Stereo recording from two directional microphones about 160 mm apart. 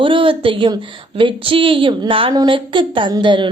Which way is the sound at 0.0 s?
35° right (ahead or behind).